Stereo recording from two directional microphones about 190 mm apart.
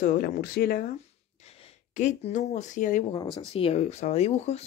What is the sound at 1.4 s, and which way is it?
Gasp, 30° left (ahead or behind).